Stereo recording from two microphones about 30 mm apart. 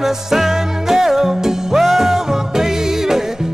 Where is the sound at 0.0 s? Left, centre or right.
Centre.